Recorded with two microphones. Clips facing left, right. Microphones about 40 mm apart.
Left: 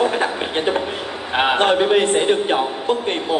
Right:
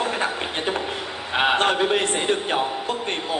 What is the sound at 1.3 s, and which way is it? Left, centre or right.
Speech, left.